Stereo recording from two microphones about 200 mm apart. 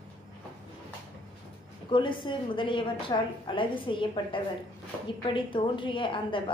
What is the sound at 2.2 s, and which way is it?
A woman's voice, 25° left (ahead or behind).